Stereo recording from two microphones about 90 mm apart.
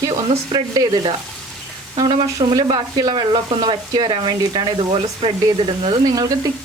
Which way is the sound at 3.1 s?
65° right (ahead or behind).